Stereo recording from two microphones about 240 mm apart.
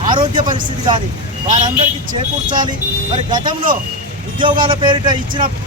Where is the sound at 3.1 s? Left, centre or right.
Centre.